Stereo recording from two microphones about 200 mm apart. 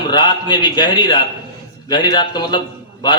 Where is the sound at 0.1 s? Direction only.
20° left (ahead or behind).